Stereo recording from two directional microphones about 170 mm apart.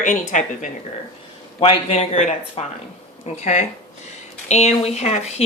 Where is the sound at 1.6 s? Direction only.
35° left (ahead or behind).